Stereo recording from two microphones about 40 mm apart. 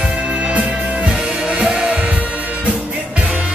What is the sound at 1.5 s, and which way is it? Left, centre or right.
Music, centre.